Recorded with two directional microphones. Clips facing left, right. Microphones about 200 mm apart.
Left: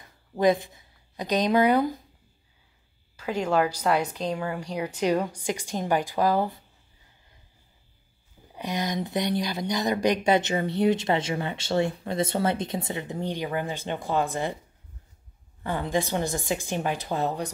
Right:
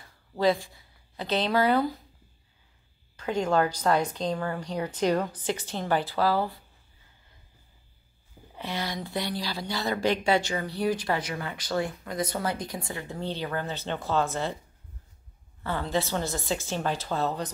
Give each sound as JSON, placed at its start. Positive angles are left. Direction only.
{"t": 0.0, "sound": "speech", "side_deg": 15}
{"t": 3.2, "sound": "a woman's voice", "side_deg": 10}
{"t": 8.5, "sound": "speech", "side_deg": 15}
{"t": 15.6, "sound": "a woman's voice", "side_deg": 15}